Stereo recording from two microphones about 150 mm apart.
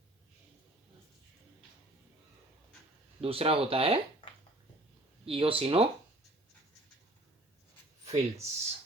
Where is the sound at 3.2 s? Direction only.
40° right (ahead or behind).